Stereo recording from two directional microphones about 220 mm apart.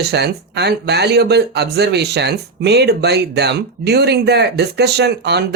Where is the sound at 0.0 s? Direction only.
50° right (ahead or behind).